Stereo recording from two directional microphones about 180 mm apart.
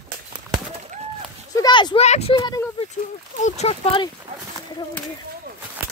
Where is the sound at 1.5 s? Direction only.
25° left (ahead or behind).